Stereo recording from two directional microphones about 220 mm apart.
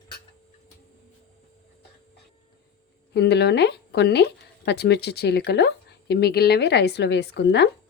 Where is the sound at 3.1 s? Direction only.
50° left (ahead or behind).